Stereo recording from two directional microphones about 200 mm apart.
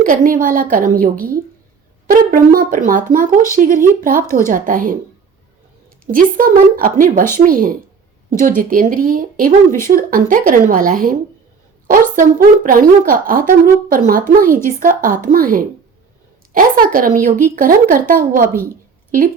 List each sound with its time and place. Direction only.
0.0 s speech: 45° right (ahead or behind)
6.1 s speech: 45° right (ahead or behind)